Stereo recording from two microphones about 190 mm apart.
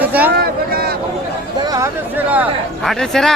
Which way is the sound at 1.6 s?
15° right (ahead or behind).